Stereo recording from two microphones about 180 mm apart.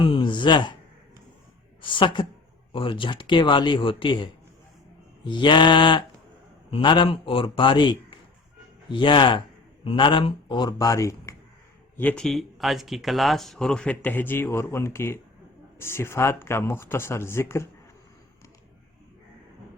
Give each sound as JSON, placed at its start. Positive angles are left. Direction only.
{"t": 0.0, "sound": "speech", "side_deg": 25}
{"t": 1.8, "sound": "a man's voice", "side_deg": 25}
{"t": 11.9, "sound": "speech", "side_deg": 5}